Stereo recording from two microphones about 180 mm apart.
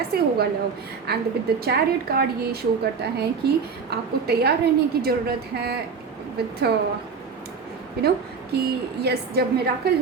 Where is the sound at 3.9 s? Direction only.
60° right (ahead or behind).